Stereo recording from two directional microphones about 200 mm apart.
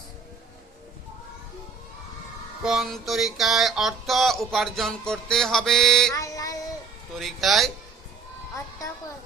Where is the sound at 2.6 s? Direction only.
Centre (ahead or behind).